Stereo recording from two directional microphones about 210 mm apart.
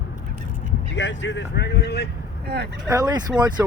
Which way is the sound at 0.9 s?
60° left (ahead or behind).